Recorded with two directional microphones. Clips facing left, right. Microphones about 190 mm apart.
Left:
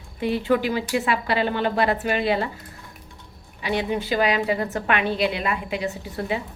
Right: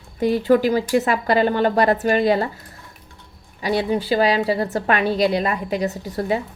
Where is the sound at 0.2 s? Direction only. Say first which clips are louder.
Right 5 dB; 40° right (ahead or behind).